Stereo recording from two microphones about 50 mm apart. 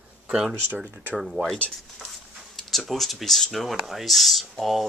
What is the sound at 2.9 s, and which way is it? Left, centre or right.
Speech, centre.